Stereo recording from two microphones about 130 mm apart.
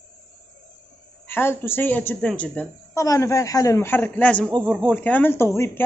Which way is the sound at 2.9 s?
25° left (ahead or behind).